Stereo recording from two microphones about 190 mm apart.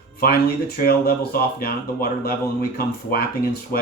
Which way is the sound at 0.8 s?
50° left (ahead or behind).